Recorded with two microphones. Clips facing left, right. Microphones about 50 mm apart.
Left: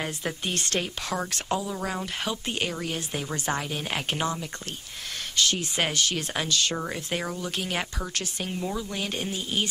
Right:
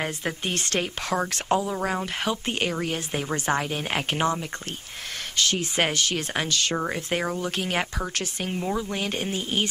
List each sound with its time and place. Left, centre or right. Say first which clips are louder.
0.0 s speech: right 2 dB; right
5.5 s speech: right 3 dB; right